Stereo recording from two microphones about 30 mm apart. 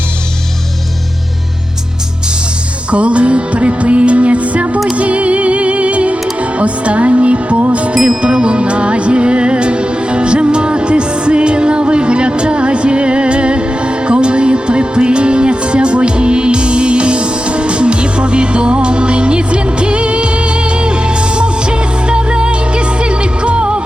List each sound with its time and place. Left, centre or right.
2.9 s music: right